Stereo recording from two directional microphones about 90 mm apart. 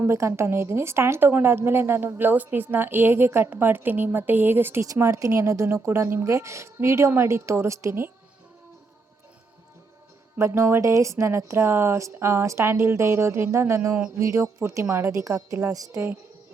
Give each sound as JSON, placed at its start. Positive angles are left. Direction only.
{"t": 0.0, "sound": "a woman's voice", "side_deg": -30}
{"t": 10.3, "sound": "a woman's voice", "side_deg": -30}